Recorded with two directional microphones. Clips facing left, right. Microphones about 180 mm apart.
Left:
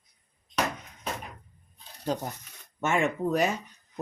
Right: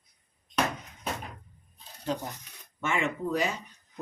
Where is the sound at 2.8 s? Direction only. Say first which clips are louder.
Left 4 dB; 45° left (ahead or behind).